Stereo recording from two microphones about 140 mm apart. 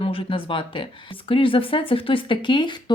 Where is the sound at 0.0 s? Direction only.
40° left (ahead or behind).